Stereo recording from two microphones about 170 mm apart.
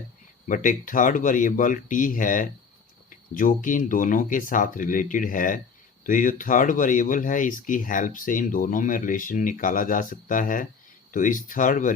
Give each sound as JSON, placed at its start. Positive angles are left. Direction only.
{"t": 0.4, "sound": "speech", "side_deg": 50}